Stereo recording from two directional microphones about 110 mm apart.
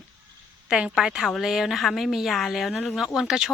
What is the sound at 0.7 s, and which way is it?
A woman's voice, 5° right (ahead or behind).